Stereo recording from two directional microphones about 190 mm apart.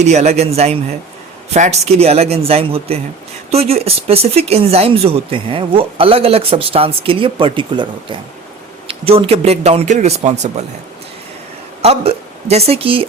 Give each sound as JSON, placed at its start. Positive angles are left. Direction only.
{"t": 0.0, "sound": "speech", "side_deg": -35}
{"t": 11.8, "sound": "a woman's voice", "side_deg": -35}